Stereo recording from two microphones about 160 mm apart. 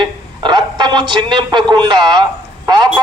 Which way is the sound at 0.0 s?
30° right (ahead or behind).